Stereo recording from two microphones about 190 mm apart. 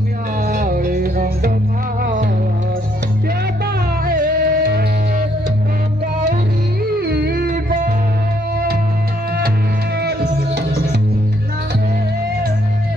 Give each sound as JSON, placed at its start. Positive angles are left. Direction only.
{"t": 0.5, "sound": "music", "side_deg": -50}
{"t": 4.0, "sound": "music", "side_deg": -50}
{"t": 7.0, "sound": "music", "side_deg": -55}
{"t": 9.9, "sound": "music", "side_deg": -55}